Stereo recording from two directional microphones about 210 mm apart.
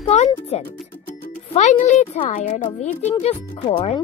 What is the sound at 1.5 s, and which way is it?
Speech, 35° left (ahead or behind).